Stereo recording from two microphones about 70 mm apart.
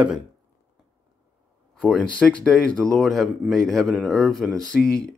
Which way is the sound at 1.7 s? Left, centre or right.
Centre.